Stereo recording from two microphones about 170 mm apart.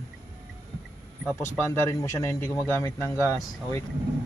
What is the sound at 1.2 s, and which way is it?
Speech, 15° left (ahead or behind).